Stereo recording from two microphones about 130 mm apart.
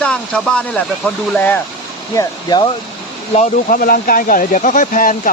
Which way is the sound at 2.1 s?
30° left (ahead or behind).